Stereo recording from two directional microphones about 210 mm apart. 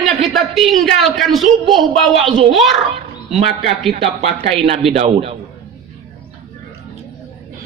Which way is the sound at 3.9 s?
30° right (ahead or behind).